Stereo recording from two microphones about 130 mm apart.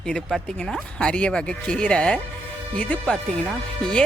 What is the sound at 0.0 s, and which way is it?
Speech, 5° left (ahead or behind).